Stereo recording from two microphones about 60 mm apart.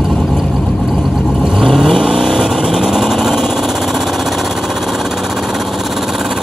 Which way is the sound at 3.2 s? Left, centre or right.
Centre.